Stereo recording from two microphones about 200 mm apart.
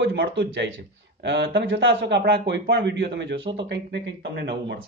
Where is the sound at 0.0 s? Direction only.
65° right (ahead or behind).